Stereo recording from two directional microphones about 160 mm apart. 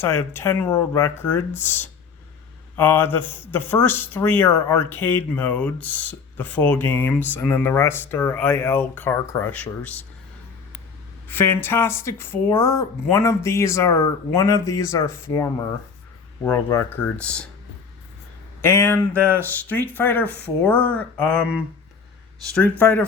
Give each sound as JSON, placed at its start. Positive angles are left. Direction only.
{"t": 0.0, "sound": "speech", "side_deg": 15}
{"t": 11.3, "sound": "speech", "side_deg": 10}
{"t": 18.6, "sound": "speech", "side_deg": 15}
{"t": 22.8, "sound": "speech", "side_deg": 10}